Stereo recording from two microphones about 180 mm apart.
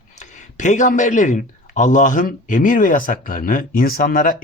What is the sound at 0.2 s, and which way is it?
Speech, 40° left (ahead or behind).